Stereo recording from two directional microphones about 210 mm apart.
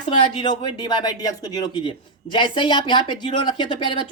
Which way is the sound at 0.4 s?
20° left (ahead or behind).